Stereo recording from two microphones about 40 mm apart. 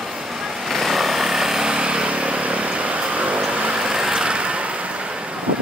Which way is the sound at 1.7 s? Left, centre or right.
Right.